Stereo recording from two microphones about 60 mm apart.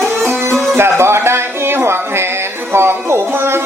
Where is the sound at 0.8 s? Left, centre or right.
Right.